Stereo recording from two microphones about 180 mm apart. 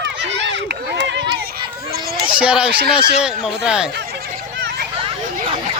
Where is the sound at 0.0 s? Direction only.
75° right (ahead or behind).